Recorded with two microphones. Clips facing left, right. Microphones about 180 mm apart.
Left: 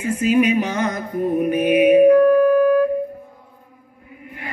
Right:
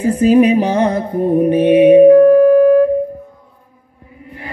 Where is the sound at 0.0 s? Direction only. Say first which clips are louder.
Right 7 dB; 35° right (ahead or behind).